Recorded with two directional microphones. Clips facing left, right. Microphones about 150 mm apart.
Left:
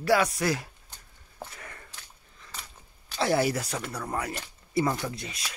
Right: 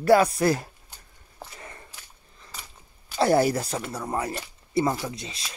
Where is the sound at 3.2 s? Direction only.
40° right (ahead or behind).